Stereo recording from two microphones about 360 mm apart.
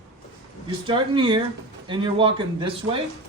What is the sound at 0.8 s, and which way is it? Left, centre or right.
Speech, centre.